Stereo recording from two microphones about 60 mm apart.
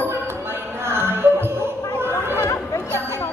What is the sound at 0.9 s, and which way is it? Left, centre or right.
Music, right.